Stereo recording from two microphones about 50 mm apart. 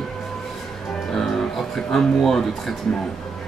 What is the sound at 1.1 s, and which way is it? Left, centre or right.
Speech, centre.